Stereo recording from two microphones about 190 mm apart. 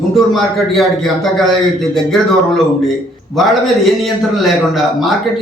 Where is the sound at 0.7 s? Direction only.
Centre (ahead or behind).